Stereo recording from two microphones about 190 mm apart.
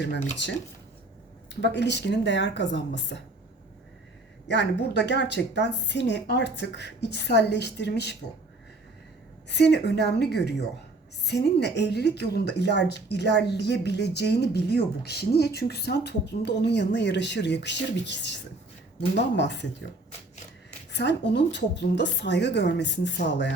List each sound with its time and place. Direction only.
1.5 s speech: 65° left (ahead or behind)
4.4 s a woman's voice: 65° left (ahead or behind)
9.5 s a woman's voice: 65° left (ahead or behind)
19.4 s speech: 65° left (ahead or behind)
20.9 s a woman's voice: 65° left (ahead or behind)